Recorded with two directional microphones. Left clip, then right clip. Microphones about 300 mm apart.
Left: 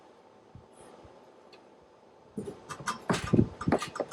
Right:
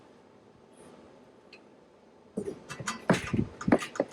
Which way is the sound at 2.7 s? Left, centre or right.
Centre.